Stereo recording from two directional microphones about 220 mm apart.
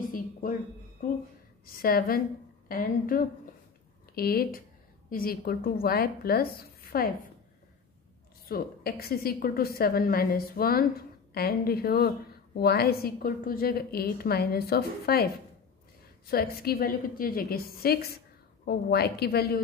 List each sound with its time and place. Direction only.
0.1 s a sound: 40° left (ahead or behind)
1.7 s a woman's voice: 40° left (ahead or behind)
8.5 s a woman's voice: 45° left (ahead or behind)
16.3 s a woman's voice: 45° left (ahead or behind)